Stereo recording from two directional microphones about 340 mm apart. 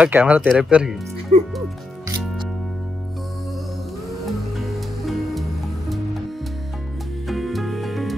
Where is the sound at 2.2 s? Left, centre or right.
Centre.